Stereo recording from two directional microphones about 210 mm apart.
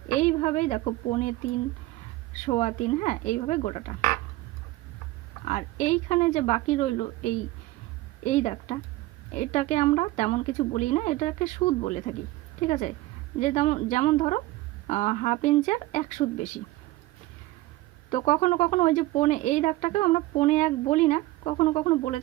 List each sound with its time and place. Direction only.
0.2 s a woman's voice: 35° left (ahead or behind)
2.4 s speech: 35° left (ahead or behind)
5.5 s speech: 35° left (ahead or behind)
18.1 s speech: 35° left (ahead or behind)